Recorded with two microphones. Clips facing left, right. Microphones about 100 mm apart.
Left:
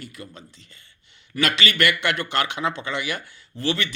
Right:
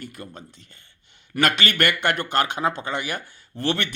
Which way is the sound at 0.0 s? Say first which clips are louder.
Right 2 dB; 50° right (ahead or behind).